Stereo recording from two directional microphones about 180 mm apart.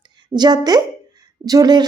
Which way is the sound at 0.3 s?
20° right (ahead or behind).